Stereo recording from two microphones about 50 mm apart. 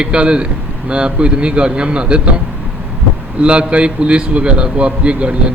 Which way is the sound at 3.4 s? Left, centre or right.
Right.